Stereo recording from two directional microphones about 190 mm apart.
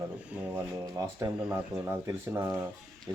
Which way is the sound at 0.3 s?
15° right (ahead or behind).